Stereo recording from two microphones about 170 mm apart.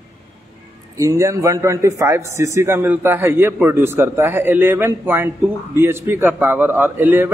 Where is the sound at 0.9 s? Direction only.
20° right (ahead or behind).